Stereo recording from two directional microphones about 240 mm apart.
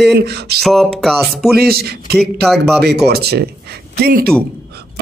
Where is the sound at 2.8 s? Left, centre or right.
Right.